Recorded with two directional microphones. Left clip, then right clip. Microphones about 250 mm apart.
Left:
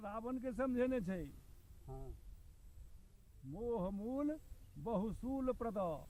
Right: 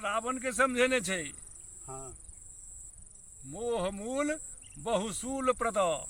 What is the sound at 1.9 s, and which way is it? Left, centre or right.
Insect, right.